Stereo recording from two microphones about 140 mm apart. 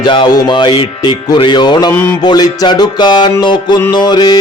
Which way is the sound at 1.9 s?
15° left (ahead or behind).